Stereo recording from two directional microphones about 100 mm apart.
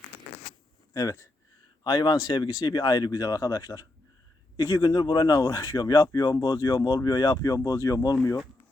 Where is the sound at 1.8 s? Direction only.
45° left (ahead or behind).